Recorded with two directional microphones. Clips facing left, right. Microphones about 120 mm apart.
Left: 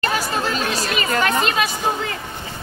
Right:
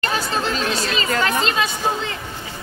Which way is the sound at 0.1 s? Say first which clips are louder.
Even; 25° right (ahead or behind).